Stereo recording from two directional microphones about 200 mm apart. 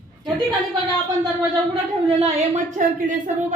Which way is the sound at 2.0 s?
30° right (ahead or behind).